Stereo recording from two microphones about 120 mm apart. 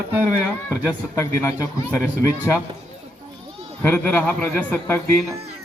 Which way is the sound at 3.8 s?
20° left (ahead or behind).